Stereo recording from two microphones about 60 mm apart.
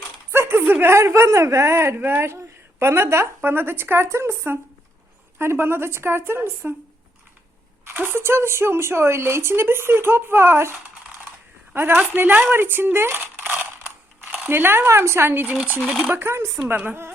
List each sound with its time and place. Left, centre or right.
0.3 s speech: right
2.0 s speech: right
7.9 s a man's voice: right
14.4 s speech: right
15.3 s speech: right
16.2 s speech: right
16.6 s speech: right